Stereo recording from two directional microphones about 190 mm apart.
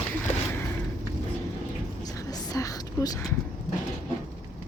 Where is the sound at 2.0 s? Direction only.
20° left (ahead or behind).